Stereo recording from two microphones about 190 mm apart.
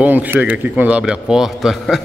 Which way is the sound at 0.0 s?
10° right (ahead or behind).